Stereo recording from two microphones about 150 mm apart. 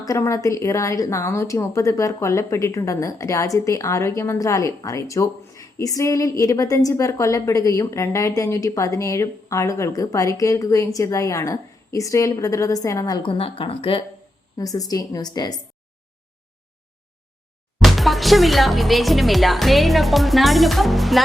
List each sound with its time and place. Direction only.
0.0 s a woman's voice: 20° left (ahead or behind); by 14.0 s 35° left (ahead or behind)
14.6 s a woman's voice: 25° left (ahead or behind)
17.8 s speech: centre (ahead or behind)